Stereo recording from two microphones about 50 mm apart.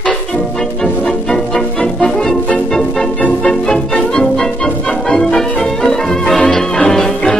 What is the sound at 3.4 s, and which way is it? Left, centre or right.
Music, centre.